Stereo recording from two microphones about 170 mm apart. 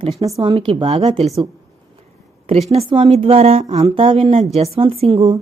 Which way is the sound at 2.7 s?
30° right (ahead or behind).